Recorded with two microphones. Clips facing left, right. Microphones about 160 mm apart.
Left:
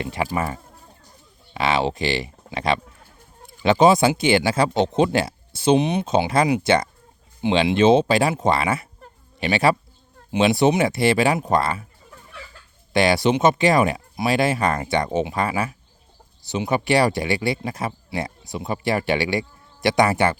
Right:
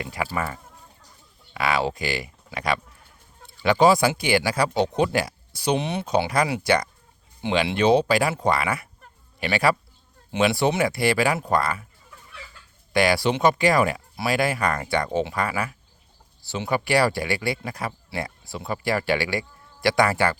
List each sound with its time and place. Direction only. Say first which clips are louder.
0.0 s speech: left 3 dB; 25° left (ahead or behind)
12.9 s speech: left 3 dB; 25° left (ahead or behind)